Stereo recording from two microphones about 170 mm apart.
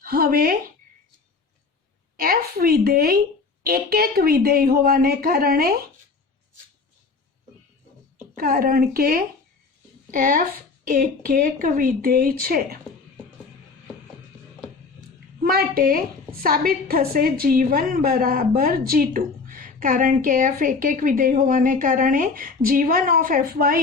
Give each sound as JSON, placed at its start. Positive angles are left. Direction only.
{"t": 0.0, "sound": "a woman's voice", "side_deg": -60}
{"t": 2.1, "sound": "a woman's voice", "side_deg": -60}
{"t": 8.4, "sound": "a woman's voice", "side_deg": -60}
{"t": 15.4, "sound": "a woman's voice", "side_deg": -60}